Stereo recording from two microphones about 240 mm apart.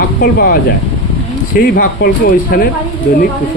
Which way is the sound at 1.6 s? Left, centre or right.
Left.